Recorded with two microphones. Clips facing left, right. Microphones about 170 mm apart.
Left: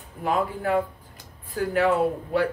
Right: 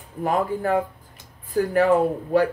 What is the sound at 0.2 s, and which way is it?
Speech, 45° right (ahead or behind).